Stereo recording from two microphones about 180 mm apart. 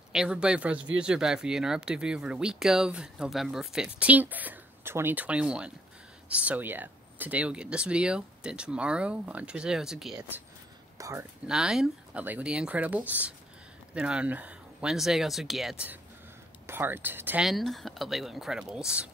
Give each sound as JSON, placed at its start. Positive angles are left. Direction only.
{"t": 0.1, "sound": "speech", "side_deg": -5}
{"t": 11.0, "sound": "speech", "side_deg": -15}
{"t": 11.4, "sound": "speech", "side_deg": -5}